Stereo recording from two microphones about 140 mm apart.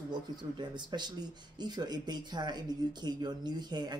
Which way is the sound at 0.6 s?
30° right (ahead or behind).